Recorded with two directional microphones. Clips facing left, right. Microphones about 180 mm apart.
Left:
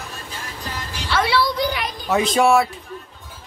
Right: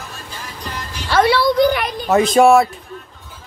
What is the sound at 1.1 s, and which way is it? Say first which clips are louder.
Speech: right 6 dB; 45° right (ahead or behind).